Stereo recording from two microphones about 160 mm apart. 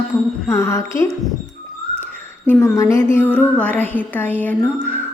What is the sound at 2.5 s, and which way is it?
A woman's voice, 15° left (ahead or behind).